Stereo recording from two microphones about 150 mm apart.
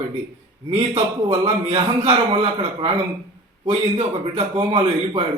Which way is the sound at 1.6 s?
40° right (ahead or behind).